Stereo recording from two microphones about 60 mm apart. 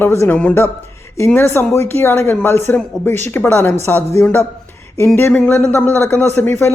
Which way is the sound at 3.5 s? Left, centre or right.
Left.